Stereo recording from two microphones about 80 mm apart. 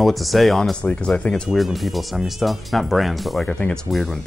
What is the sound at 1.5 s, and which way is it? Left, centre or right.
Speech, centre.